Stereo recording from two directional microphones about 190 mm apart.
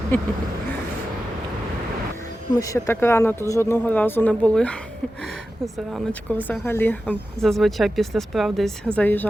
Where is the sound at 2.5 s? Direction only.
20° left (ahead or behind).